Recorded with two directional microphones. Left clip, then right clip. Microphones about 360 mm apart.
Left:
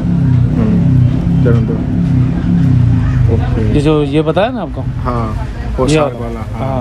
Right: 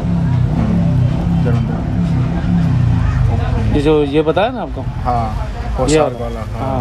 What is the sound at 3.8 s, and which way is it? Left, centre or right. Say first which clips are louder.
Speech: even; centre.